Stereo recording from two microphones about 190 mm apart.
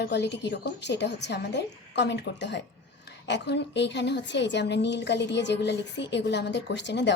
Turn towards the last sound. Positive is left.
turn(degrees=65)  # may be behind; listen again after turning